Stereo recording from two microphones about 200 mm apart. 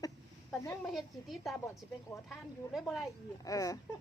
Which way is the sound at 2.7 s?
Centre (ahead or behind).